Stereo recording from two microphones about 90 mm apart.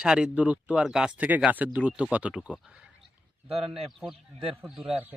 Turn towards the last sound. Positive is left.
turn(degrees=-5)  # may be behind; listen again after turning